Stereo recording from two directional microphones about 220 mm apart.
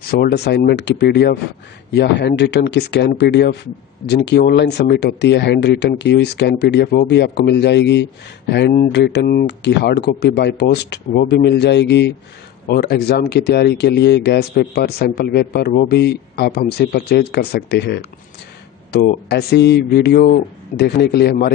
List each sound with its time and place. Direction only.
0.0 s speech: 45° left (ahead or behind)